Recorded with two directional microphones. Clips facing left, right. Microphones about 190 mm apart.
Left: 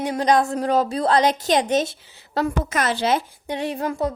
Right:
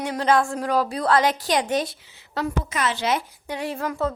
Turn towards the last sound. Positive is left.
turn(degrees=20)  # may be behind; listen again after turning